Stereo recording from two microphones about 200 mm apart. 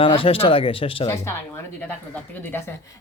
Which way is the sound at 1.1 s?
10° left (ahead or behind).